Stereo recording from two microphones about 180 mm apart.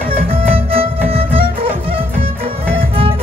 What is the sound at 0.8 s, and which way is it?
Music, 30° right (ahead or behind).